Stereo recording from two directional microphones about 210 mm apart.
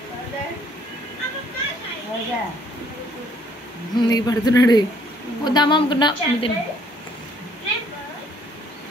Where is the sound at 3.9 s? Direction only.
20° left (ahead or behind).